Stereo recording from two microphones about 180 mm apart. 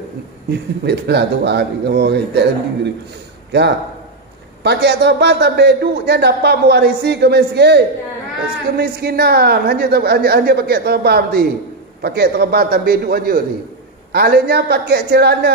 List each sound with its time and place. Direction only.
0.5 s a man's voice: 70° right (ahead or behind)
4.6 s a man's voice: 70° right (ahead or behind)